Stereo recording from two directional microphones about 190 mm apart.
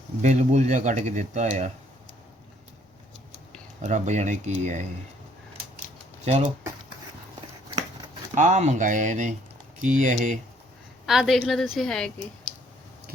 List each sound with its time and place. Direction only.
0.2 s speech: 40° right (ahead or behind)
3.8 s speech: 35° right (ahead or behind)
6.2 s speech: 35° right (ahead or behind)
8.4 s speech: 40° right (ahead or behind)
11.0 s a woman's voice: centre (ahead or behind)